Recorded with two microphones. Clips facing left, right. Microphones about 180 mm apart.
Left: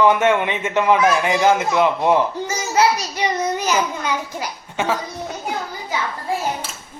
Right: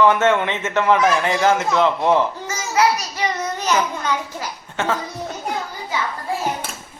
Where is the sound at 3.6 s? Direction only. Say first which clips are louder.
Even; 10° left (ahead or behind).